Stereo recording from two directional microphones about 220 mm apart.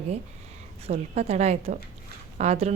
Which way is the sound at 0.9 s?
30° right (ahead or behind).